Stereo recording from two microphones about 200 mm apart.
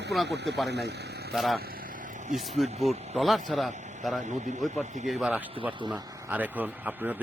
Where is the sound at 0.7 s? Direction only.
55° right (ahead or behind).